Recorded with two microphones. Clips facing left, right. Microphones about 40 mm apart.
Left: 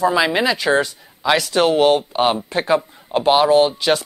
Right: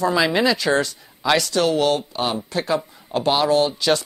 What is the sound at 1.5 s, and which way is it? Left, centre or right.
Speech, left.